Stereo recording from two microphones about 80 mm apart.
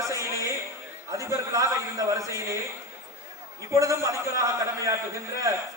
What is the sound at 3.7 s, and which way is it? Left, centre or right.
A man's voice, right.